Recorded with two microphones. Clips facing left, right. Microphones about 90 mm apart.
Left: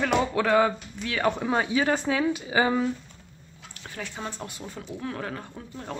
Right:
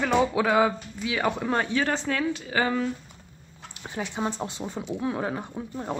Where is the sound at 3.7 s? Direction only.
20° right (ahead or behind).